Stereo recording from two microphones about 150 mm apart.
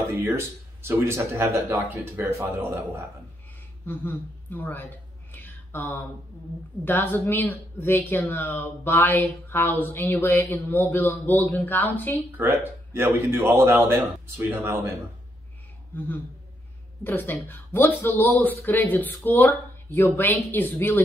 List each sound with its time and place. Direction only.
0.8 s a man's voice: 15° right (ahead or behind)
3.8 s speech: 15° left (ahead or behind)
12.4 s a man's voice: 15° right (ahead or behind)
17.0 s speech: 15° left (ahead or behind)